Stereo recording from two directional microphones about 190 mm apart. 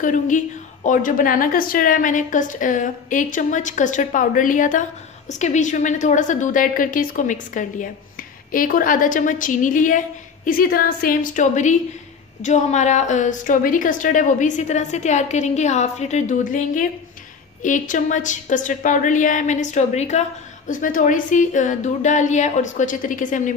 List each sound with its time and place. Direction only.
0.0 s a woman's voice: 45° left (ahead or behind)